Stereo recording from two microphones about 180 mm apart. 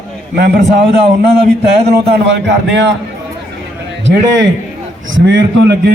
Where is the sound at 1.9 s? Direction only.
75° right (ahead or behind).